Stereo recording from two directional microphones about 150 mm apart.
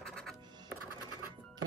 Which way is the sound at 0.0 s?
5° left (ahead or behind).